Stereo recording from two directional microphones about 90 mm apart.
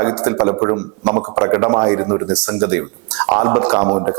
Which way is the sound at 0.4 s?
20° right (ahead or behind).